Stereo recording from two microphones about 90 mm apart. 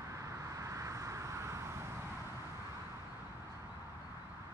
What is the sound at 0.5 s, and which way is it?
Vehicle, 35° right (ahead or behind).